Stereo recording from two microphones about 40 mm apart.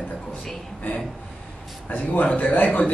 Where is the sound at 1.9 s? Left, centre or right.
Left.